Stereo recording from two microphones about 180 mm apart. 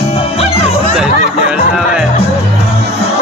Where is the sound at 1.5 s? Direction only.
5° right (ahead or behind).